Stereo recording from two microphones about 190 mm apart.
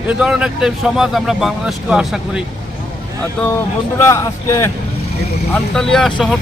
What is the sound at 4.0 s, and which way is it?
Speech, 15° left (ahead or behind).